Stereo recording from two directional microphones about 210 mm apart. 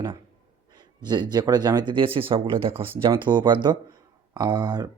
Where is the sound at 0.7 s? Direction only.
20° right (ahead or behind).